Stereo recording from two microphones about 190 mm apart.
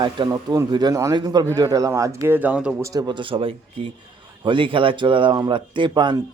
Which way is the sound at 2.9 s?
20° right (ahead or behind).